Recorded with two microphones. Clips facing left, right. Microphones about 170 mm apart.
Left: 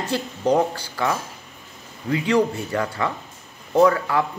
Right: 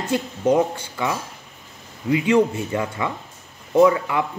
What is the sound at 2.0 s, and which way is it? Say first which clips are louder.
Speech: right 2 dB; 20° right (ahead or behind).